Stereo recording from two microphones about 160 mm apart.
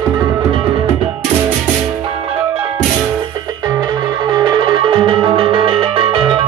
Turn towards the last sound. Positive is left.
turn(degrees=-35)  # may be behind; listen again after turning